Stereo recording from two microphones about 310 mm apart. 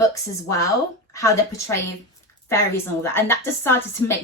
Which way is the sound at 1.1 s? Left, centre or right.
Centre.